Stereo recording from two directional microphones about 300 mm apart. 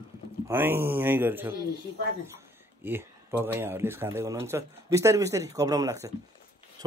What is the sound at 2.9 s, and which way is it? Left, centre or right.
Speech, centre.